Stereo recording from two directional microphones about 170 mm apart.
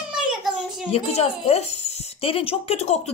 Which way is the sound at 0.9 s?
35° left (ahead or behind).